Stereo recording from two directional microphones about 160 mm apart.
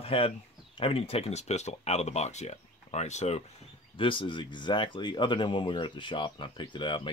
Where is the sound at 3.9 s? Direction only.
30° left (ahead or behind).